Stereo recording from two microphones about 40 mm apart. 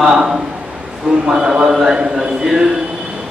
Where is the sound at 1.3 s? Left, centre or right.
Centre.